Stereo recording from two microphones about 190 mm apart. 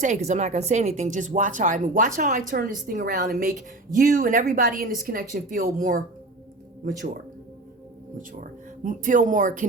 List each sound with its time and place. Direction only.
0.0 s speech: 35° right (ahead or behind)
8.4 s speech: 45° right (ahead or behind)